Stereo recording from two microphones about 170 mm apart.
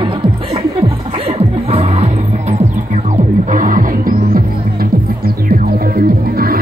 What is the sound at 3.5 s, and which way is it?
Music, 50° right (ahead or behind).